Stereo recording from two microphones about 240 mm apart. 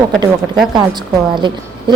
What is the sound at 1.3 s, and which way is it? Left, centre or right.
Speech, centre.